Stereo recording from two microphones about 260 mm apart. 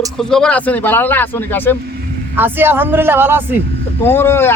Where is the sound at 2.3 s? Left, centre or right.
Centre.